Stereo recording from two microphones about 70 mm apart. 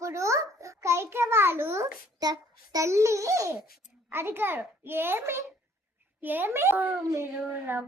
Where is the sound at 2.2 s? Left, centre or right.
Right.